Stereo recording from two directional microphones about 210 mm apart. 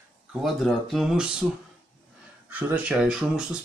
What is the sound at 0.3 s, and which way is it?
Speech, centre (ahead or behind).